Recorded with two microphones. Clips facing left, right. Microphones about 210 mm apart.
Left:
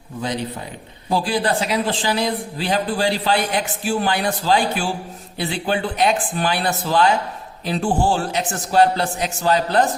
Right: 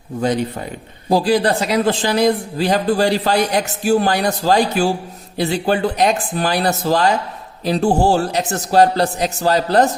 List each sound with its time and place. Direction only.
1.1 s a man's voice: 40° right (ahead or behind)